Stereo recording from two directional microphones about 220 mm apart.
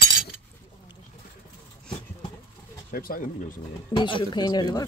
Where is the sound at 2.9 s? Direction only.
40° left (ahead or behind).